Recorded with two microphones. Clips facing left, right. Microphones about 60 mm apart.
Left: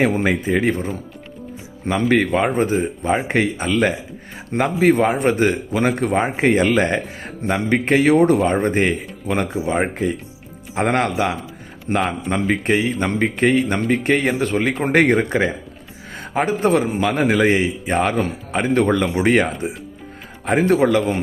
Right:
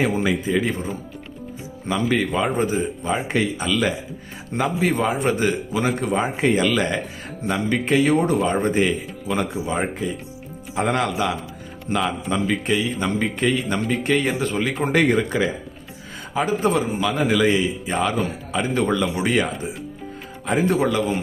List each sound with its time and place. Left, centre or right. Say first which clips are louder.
0.0 s speech: left 3 dB; left